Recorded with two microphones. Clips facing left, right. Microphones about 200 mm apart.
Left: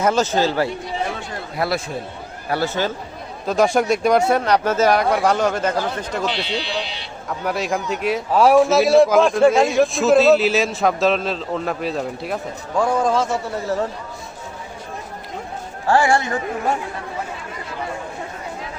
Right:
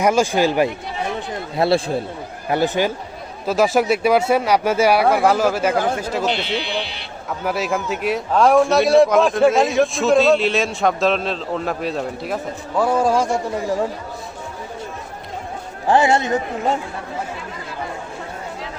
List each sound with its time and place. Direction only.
0.0 s speech: 10° right (ahead or behind)
1.5 s speech: 30° right (ahead or behind)
2.5 s speech: 15° right (ahead or behind)
3.4 s a man's voice: 5° right (ahead or behind)
5.7 s speech: 50° right (ahead or behind)
6.0 s speech: 5° right (ahead or behind)
7.3 s a man's voice: centre (ahead or behind)
15.9 s speech: 20° right (ahead or behind)